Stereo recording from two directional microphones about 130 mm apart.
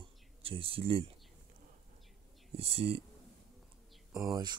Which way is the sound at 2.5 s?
50° right (ahead or behind).